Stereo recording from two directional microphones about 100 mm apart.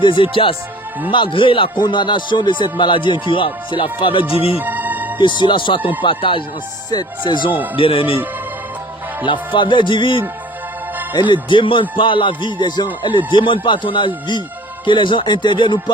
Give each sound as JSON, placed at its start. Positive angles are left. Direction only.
{"t": 0.0, "sound": "speech", "side_deg": 55}
{"t": 4.5, "sound": "music", "side_deg": -20}
{"t": 5.4, "sound": "speech", "side_deg": 55}
{"t": 7.8, "sound": "speech", "side_deg": 60}
{"t": 9.2, "sound": "speech", "side_deg": 55}